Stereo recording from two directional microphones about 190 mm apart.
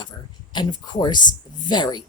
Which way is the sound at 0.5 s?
25° left (ahead or behind).